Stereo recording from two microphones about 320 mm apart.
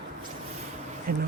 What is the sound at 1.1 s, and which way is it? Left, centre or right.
Speech, right.